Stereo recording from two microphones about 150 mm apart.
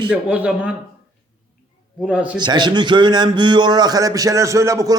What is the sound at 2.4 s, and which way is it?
Speech, 30° right (ahead or behind).